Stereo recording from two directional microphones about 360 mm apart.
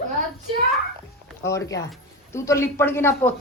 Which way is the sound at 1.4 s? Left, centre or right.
Centre.